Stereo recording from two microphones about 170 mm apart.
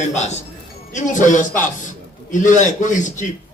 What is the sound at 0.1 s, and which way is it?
A man's voice, 40° left (ahead or behind).